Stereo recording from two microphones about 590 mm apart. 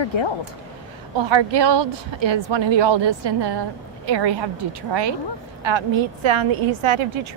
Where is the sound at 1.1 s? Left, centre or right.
Right.